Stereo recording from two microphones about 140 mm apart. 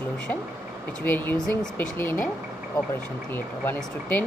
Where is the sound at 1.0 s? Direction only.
15° left (ahead or behind).